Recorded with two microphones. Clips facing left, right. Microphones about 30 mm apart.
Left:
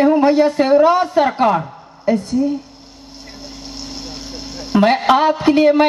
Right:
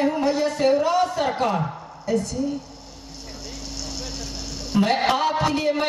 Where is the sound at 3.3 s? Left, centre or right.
Left.